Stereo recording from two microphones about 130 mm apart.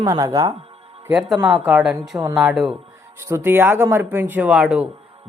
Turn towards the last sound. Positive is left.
turn(degrees=-5)  # may be behind; listen again after turning